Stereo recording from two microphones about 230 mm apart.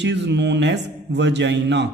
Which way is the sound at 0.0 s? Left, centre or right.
Right.